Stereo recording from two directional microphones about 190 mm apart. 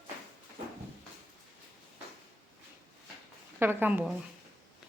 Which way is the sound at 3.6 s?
10° right (ahead or behind).